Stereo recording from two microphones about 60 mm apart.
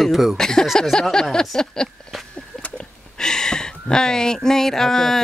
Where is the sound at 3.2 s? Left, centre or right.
Centre.